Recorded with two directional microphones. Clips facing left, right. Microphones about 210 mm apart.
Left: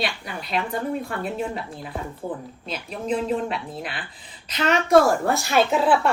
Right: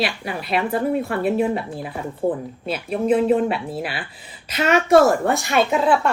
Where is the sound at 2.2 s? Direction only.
30° right (ahead or behind).